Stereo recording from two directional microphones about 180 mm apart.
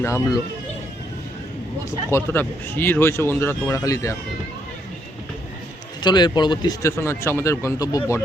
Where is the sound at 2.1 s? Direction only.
15° left (ahead or behind).